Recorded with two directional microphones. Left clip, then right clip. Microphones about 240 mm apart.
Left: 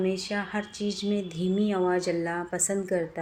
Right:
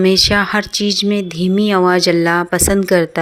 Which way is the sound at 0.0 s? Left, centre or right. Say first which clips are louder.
Right 17 dB; right.